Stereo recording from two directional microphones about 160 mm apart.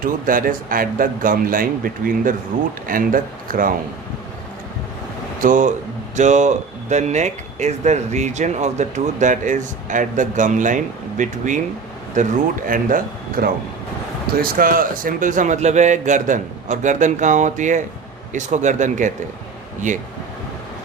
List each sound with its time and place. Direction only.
0.0 s speech: 60° right (ahead or behind)
5.4 s speech: 55° right (ahead or behind)